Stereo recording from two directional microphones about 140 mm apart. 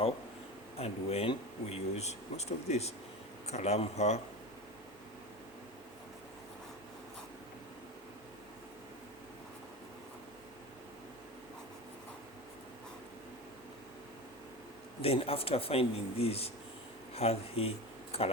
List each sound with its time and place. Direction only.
0.8 s speech: 45° left (ahead or behind)
15.0 s speech: 45° left (ahead or behind)